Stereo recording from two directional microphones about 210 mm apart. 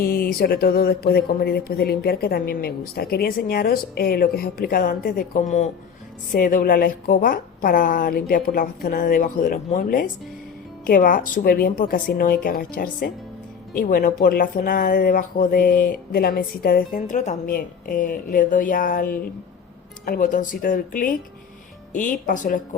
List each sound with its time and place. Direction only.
0.0 s a woman's voice: 45° left (ahead or behind)